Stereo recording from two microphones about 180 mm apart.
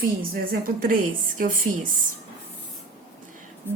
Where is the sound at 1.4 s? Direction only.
50° right (ahead or behind).